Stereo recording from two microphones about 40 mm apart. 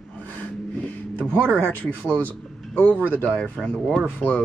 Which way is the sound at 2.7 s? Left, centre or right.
Left.